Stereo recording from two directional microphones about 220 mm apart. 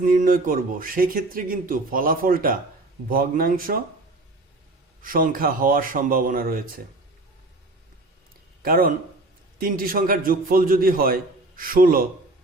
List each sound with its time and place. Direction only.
0.0 s speech: 40° right (ahead or behind)
5.0 s speech: 40° right (ahead or behind)
8.6 s speech: 40° right (ahead or behind)